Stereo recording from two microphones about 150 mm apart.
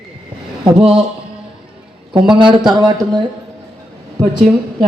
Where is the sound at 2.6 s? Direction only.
25° right (ahead or behind).